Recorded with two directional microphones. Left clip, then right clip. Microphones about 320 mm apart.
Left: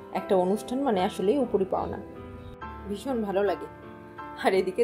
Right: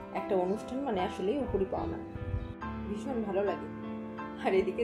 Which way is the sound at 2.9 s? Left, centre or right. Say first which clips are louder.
Left 6 dB; left.